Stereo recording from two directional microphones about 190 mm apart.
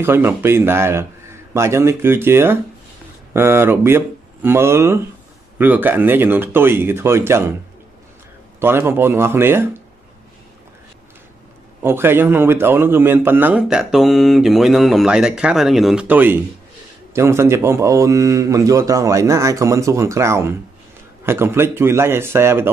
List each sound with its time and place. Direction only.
0.0 s speech: 15° right (ahead or behind)
8.5 s speech: 10° right (ahead or behind)
11.8 s a man's voice: 10° right (ahead or behind)